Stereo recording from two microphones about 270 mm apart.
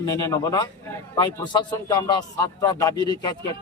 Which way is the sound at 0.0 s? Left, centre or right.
Centre.